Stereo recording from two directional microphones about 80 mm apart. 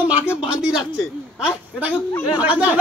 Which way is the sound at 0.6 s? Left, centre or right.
Centre.